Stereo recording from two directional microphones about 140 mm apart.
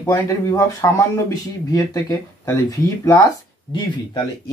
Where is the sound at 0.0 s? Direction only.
20° left (ahead or behind).